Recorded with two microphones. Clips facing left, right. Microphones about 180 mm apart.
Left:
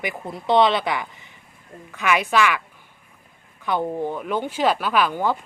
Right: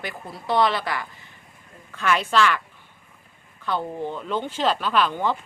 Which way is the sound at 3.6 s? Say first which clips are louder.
Left 3 dB; 15° left (ahead or behind).